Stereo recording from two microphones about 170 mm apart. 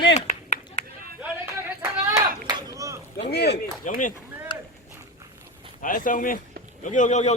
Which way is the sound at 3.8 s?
50° left (ahead or behind).